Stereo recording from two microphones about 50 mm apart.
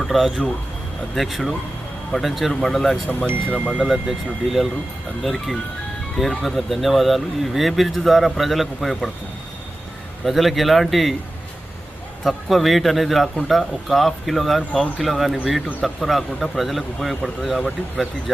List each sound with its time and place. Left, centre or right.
0.0 s speech: centre
3.5 s speech: right
3.8 s speech: centre
10.2 s speech: centre
12.2 s speech: centre